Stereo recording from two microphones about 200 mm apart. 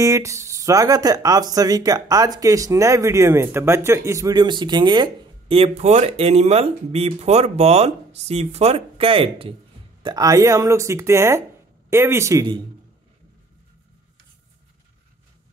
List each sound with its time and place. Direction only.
0.0 s a woman's voice: 15° right (ahead or behind)